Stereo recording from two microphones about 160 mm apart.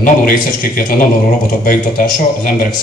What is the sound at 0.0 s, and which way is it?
A man's voice, 60° left (ahead or behind).